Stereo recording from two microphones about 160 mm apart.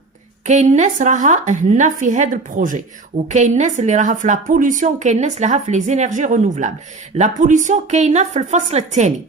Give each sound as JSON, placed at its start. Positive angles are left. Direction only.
{"t": 0.4, "sound": "a woman's voice", "side_deg": -45}